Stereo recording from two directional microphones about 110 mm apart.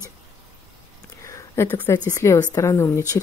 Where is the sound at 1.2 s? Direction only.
25° left (ahead or behind).